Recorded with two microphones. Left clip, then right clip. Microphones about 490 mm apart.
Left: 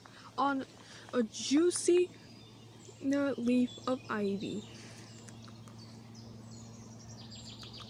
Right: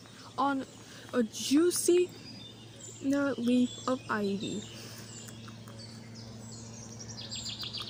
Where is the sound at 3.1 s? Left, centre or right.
Left.